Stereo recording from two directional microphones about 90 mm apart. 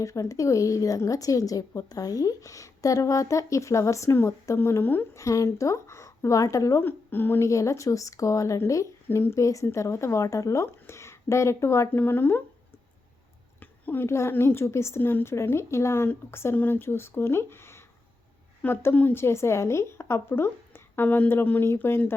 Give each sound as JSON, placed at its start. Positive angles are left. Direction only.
{"t": 0.0, "sound": "speech", "side_deg": 40}
{"t": 5.2, "sound": "speech", "side_deg": 35}
{"t": 6.8, "sound": "speech", "side_deg": 25}
{"t": 13.6, "sound": "speech", "side_deg": 20}